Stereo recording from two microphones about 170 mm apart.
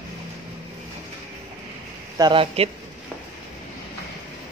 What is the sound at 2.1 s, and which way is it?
Speech, 30° right (ahead or behind).